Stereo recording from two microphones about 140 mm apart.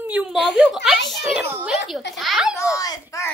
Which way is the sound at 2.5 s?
25° left (ahead or behind).